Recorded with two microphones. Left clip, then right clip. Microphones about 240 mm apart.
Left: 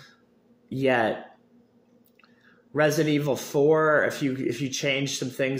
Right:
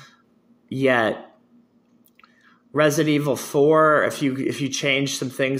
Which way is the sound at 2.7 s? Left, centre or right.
Centre.